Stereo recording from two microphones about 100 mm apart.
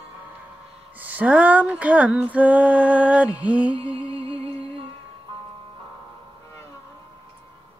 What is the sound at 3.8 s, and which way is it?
Music, 60° right (ahead or behind).